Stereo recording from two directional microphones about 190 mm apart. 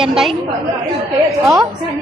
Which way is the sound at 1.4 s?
15° right (ahead or behind).